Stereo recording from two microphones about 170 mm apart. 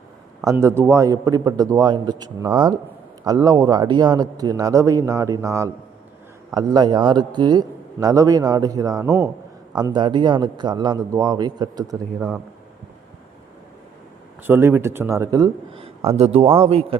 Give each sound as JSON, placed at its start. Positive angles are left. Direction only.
{"t": 0.4, "sound": "a man's voice", "side_deg": -15}
{"t": 14.4, "sound": "speech", "side_deg": -15}
{"t": 16.1, "sound": "a man's voice", "side_deg": -35}